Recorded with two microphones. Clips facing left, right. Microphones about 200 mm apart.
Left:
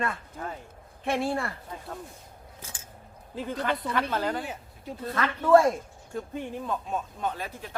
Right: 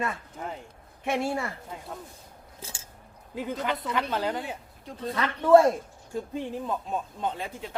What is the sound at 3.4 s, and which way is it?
Speech, 15° right (ahead or behind).